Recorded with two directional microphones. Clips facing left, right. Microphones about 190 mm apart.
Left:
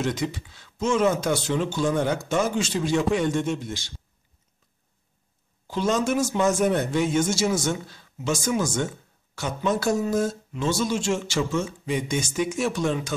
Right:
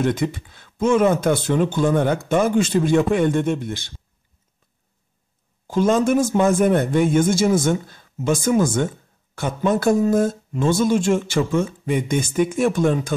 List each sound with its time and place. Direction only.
0.0 s speech: 55° right (ahead or behind)
5.7 s speech: 50° right (ahead or behind)